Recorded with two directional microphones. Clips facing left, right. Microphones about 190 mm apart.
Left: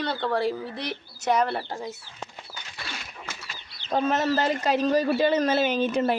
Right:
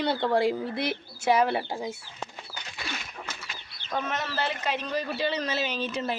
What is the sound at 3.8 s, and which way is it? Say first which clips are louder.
Speech: left 8 dB; 35° left (ahead or behind).